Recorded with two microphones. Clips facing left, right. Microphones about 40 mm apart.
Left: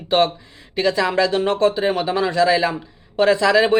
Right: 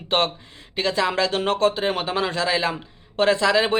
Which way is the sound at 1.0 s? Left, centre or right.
Centre.